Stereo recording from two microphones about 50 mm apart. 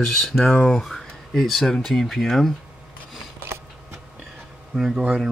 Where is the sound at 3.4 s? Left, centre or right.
Right.